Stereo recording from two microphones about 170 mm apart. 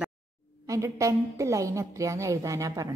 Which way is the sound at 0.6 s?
20° right (ahead or behind).